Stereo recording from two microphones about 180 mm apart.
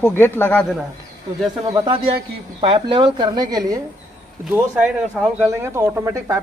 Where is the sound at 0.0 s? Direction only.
10° left (ahead or behind).